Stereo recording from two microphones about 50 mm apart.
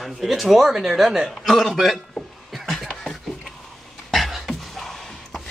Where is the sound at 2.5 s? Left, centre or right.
Centre.